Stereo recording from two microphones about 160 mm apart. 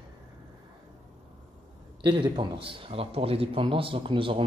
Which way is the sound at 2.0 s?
30° right (ahead or behind).